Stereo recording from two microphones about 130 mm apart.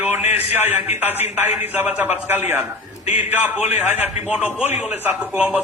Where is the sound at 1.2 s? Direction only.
55° left (ahead or behind).